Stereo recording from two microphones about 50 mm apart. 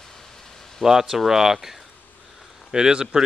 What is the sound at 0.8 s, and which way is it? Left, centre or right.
Speech, centre.